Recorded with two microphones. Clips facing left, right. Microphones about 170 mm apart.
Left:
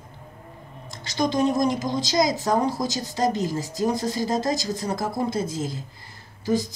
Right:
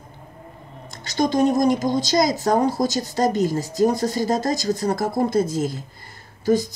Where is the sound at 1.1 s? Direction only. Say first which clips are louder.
Right 3 dB; 45° right (ahead or behind).